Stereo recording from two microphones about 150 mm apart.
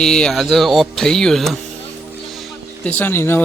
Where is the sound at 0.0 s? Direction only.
5° left (ahead or behind).